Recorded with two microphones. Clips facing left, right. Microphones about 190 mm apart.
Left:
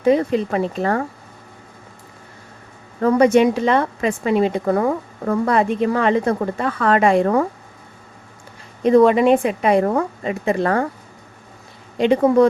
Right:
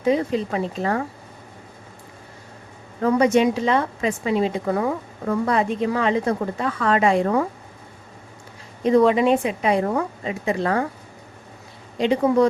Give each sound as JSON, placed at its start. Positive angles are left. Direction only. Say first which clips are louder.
{"t": 0.0, "sound": "a woman's voice", "louder": "left 4 dB", "side_deg": 60}
{"t": 3.0, "sound": "a woman's voice", "louder": "left 4 dB", "side_deg": 55}
{"t": 8.8, "sound": "a woman's voice", "louder": "left 4 dB", "side_deg": 55}
{"t": 11.9, "sound": "a woman's voice", "louder": "left 4 dB", "side_deg": 55}